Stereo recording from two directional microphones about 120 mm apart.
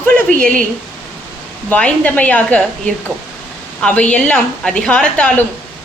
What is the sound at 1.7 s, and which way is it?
A woman's voice, 10° left (ahead or behind).